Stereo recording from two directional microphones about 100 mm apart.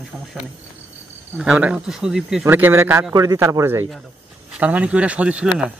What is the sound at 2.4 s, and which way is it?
Speech, 25° right (ahead or behind).